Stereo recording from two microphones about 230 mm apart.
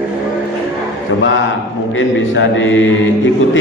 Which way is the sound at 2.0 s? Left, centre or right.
Left.